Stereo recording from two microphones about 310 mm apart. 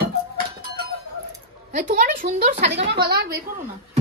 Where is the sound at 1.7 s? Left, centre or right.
Right.